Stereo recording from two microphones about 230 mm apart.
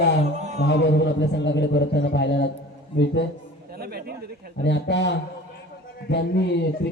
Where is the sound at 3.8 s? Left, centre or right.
Right.